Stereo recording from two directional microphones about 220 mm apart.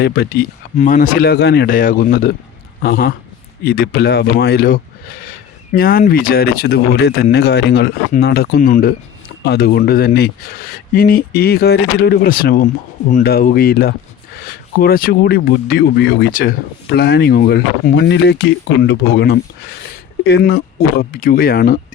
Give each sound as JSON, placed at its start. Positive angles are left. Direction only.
{"t": 0.0, "sound": "speech", "side_deg": 45}